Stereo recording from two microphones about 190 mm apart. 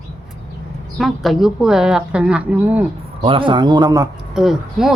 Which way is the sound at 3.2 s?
25° right (ahead or behind).